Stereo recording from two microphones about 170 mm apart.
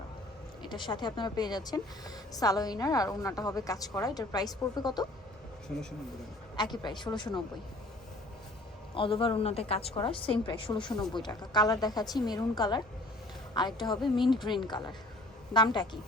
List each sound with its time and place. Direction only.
0.6 s a woman's voice: 25° left (ahead or behind)
6.6 s a woman's voice: 25° left (ahead or behind)
9.0 s a woman's voice: 30° left (ahead or behind)